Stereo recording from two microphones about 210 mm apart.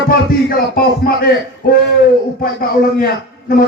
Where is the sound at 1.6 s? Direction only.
45° left (ahead or behind).